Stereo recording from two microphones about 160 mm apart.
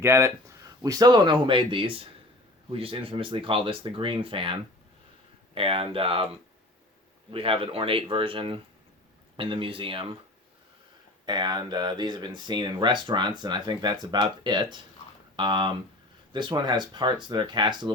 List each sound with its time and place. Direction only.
0.0 s speech: 15° right (ahead or behind); by 4.5 s 35° right (ahead or behind)
5.5 s speech: 35° right (ahead or behind)
7.3 s speech: 35° right (ahead or behind)
11.3 s speech: 25° right (ahead or behind)